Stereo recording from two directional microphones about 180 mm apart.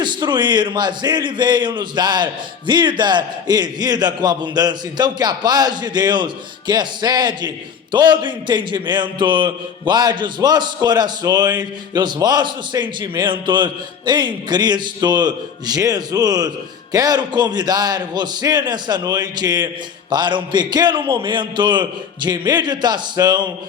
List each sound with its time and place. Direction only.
0.0 s a man's voice: 25° right (ahead or behind)